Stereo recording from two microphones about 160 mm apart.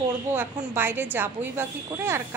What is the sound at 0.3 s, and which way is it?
A woman's voice, 15° right (ahead or behind).